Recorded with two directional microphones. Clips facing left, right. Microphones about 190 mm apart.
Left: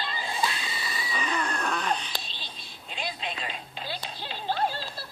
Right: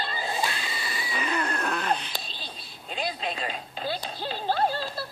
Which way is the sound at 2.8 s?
40° right (ahead or behind).